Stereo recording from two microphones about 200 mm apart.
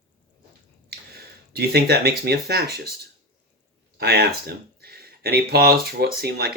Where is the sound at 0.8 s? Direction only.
50° right (ahead or behind).